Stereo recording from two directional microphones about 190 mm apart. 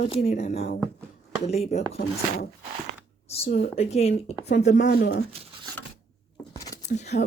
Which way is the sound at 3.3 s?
35° left (ahead or behind).